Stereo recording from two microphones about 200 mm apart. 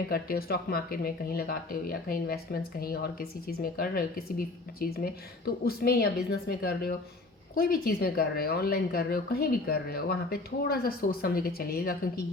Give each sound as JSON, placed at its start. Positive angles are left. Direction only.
{"t": 0.1, "sound": "speech", "side_deg": 50}